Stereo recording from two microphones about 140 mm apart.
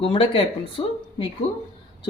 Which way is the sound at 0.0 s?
40° left (ahead or behind).